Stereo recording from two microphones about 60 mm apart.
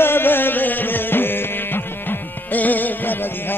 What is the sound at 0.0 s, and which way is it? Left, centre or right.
Music, left.